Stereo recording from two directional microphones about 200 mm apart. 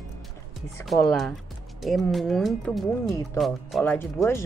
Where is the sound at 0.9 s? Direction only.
Centre (ahead or behind).